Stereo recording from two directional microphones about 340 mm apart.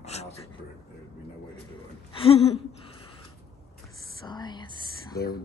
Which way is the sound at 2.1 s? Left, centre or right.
Centre.